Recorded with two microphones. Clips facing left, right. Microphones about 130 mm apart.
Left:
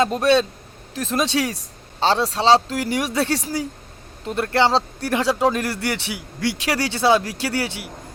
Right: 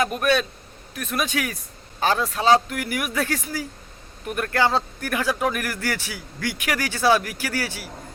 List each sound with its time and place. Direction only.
0.0 s speech: 25° left (ahead or behind)